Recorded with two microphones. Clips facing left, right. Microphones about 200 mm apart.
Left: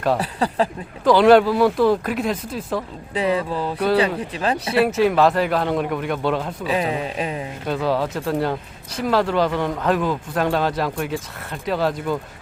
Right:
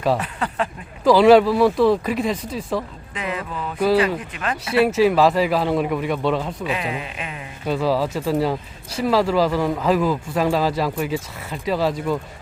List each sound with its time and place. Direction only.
0.2 s speech: 35° left (ahead or behind)
1.0 s speech: centre (ahead or behind)
3.2 s speech: 30° left (ahead or behind)
4.8 s speech: centre (ahead or behind)
6.7 s speech: 35° left (ahead or behind)
7.7 s speech: centre (ahead or behind)